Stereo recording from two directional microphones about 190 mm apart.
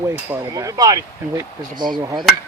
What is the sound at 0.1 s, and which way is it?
Speech, 15° right (ahead or behind).